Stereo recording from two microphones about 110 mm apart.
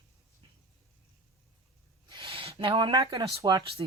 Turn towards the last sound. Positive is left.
turn(degrees=-40)  # may be behind; listen again after turning